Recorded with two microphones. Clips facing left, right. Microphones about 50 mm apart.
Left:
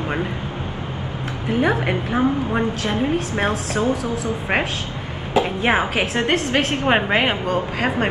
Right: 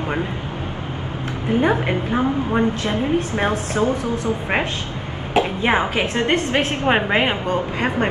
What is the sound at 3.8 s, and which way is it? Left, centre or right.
Speech, right.